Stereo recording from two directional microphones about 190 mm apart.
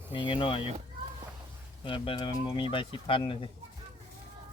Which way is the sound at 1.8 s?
25° left (ahead or behind).